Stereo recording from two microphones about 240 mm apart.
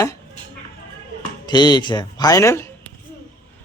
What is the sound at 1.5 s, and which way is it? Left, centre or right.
Speech, centre.